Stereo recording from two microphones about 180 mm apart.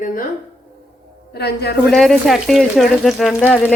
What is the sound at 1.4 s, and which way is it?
Speech, 65° left (ahead or behind).